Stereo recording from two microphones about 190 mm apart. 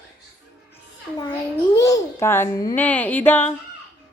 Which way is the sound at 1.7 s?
15° left (ahead or behind).